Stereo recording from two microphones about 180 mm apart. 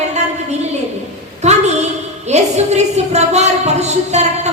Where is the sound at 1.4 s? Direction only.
40° right (ahead or behind).